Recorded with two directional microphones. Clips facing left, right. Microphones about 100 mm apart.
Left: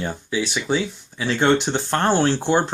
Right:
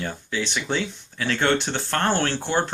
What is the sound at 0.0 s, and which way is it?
Speech, 15° left (ahead or behind).